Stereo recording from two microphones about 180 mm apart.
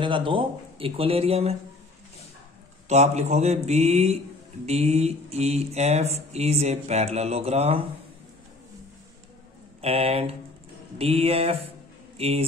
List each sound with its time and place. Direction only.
0.0 s mantra: 30° right (ahead or behind)
2.9 s mantra: 40° right (ahead or behind)
9.8 s speech: 35° right (ahead or behind)
11.0 s mantra: 35° right (ahead or behind)